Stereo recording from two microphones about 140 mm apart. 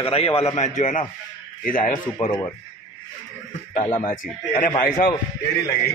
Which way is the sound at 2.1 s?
30° left (ahead or behind).